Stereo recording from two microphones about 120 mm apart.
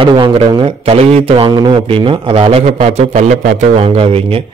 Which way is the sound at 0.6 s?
50° right (ahead or behind).